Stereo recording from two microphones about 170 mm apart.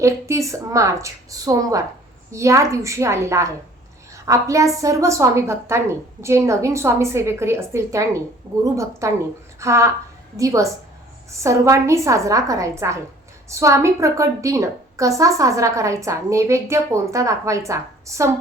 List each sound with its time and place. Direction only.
0.0 s a woman's voice: 15° right (ahead or behind)